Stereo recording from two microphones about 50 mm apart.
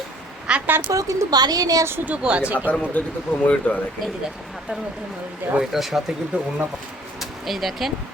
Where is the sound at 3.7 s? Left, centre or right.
Left.